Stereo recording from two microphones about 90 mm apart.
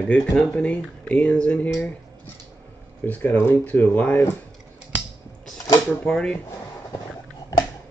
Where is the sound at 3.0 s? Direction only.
20° left (ahead or behind).